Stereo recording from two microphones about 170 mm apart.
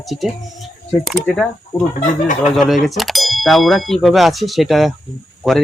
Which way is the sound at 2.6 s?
Centre (ahead or behind).